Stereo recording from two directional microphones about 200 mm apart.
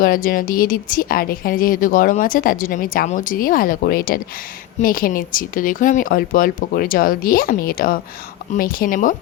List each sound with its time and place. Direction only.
0.0 s speech: 45° left (ahead or behind)